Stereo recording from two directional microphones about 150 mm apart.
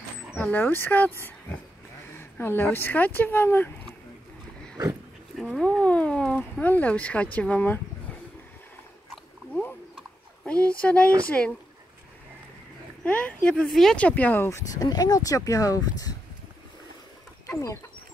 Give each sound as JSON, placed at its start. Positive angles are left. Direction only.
{"t": 0.4, "sound": "speech", "side_deg": 15}
{"t": 2.1, "sound": "speech", "side_deg": 15}
{"t": 5.3, "sound": "speech", "side_deg": 0}
{"t": 9.5, "sound": "a sound", "side_deg": 10}
{"t": 10.4, "sound": "speech", "side_deg": 10}
{"t": 13.0, "sound": "speech", "side_deg": 10}
{"t": 14.8, "sound": "speech", "side_deg": 25}
{"t": 17.5, "sound": "fowl", "side_deg": 20}